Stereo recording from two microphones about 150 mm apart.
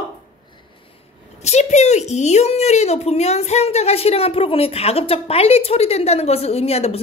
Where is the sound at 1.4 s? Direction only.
50° left (ahead or behind).